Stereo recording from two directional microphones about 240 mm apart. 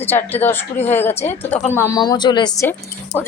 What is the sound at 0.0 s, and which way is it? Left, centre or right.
Speech, centre.